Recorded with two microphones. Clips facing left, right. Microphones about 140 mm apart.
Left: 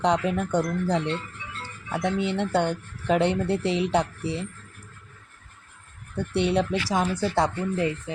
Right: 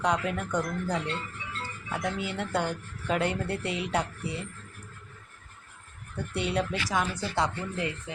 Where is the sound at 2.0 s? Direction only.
25° left (ahead or behind).